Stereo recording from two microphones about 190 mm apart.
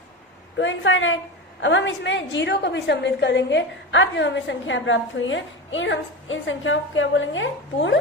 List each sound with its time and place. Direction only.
0.6 s a woman's voice: 80° left
1.6 s a woman's voice: 70° left (ahead or behind)